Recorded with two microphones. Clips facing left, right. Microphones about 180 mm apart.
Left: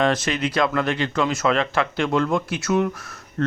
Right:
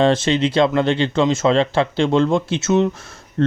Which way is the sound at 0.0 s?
25° right (ahead or behind).